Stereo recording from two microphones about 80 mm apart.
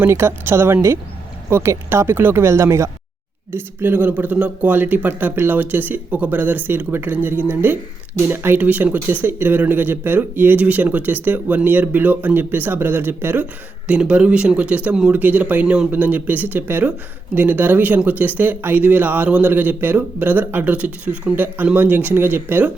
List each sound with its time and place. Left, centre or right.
0.0 s speech: right
3.5 s speech: right
13.4 s speech: centre